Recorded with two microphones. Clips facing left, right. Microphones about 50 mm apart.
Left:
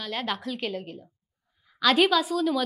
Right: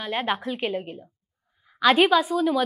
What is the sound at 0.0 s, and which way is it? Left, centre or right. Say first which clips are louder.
A woman's voice: right 4 dB; right.